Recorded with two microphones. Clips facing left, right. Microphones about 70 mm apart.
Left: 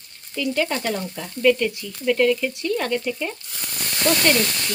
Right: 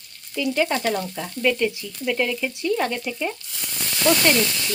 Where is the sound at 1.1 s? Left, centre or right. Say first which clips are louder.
Left 4 dB; centre.